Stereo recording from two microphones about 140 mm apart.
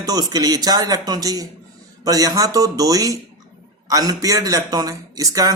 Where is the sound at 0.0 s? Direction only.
30° right (ahead or behind).